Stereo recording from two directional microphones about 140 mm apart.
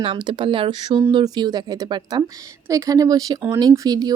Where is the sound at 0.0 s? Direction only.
35° right (ahead or behind).